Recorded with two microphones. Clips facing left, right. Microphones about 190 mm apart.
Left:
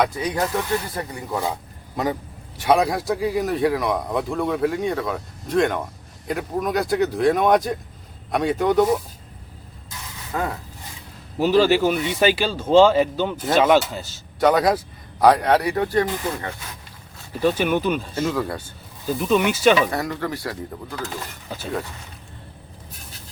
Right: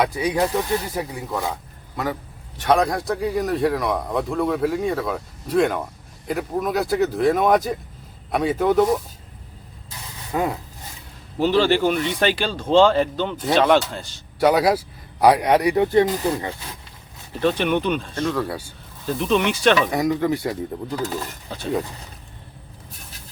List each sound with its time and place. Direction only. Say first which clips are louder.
0.0 s speech: right 2 dB; 10° right (ahead or behind)
2.6 s speech: even; 5° left (ahead or behind)
10.3 s speech: right 3 dB; 15° right (ahead or behind)
11.3 s speech: left 1 dB; 10° left (ahead or behind)
14.3 s speech: even; 10° right (ahead or behind)
16.0 s speech: right 4 dB; 35° right (ahead or behind)
17.4 s speech: even; 5° left (ahead or behind)
19.9 s speech: right 5 dB; 15° right (ahead or behind)